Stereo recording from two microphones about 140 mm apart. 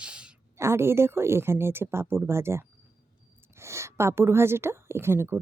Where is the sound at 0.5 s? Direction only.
20° right (ahead or behind).